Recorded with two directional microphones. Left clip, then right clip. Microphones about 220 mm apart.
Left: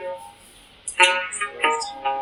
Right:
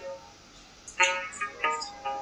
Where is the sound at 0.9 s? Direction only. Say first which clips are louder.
Left 8 dB; 35° left (ahead or behind).